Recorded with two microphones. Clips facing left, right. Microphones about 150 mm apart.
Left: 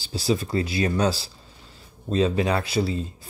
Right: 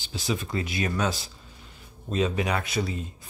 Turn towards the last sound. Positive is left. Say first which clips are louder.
# left 5 dB
turn(degrees=30)  # may be behind; listen again after turning